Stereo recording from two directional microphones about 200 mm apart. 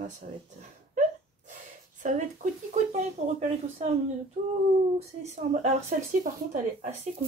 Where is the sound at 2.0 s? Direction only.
40° right (ahead or behind).